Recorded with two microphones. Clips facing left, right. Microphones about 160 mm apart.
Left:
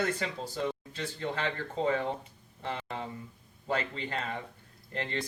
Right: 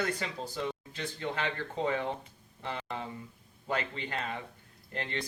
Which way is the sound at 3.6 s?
35° left (ahead or behind).